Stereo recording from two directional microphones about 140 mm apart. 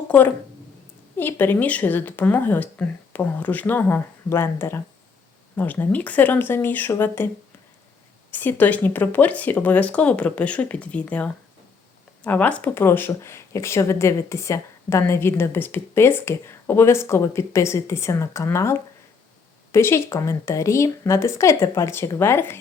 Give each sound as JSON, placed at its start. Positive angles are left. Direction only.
{"t": 1.1, "sound": "speech", "side_deg": 15}
{"t": 8.3, "sound": "speech", "side_deg": 15}